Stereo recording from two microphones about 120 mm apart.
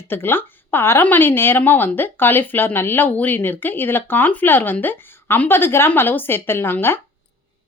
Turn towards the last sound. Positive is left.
turn(degrees=20)  # may be behind; listen again after turning